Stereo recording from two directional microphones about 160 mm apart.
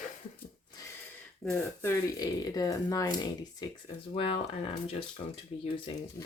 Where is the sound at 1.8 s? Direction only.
20° left (ahead or behind).